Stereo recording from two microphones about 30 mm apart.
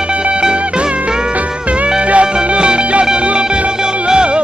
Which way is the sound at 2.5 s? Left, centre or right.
Right.